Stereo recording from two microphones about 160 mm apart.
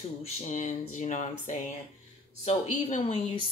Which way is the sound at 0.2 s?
50° left (ahead or behind).